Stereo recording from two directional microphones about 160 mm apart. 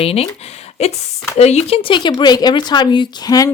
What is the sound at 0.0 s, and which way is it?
Speech, 40° left (ahead or behind).